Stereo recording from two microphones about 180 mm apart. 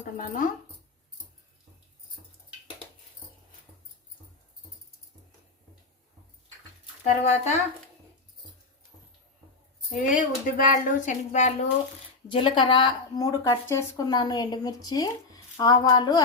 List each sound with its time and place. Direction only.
7.0 s speech: 40° left (ahead or behind)
9.9 s speech: 50° left (ahead or behind)
12.3 s a woman's voice: 30° left (ahead or behind)